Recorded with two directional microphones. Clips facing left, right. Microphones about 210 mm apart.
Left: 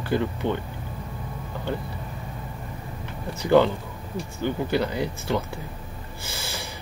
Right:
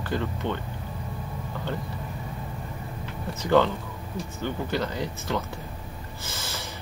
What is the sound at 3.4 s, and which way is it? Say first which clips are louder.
Speech: left 3 dB; 15° left (ahead or behind).